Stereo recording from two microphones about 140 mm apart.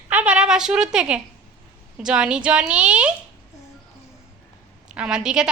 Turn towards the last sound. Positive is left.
turn(degrees=-5)  # may be behind; listen again after turning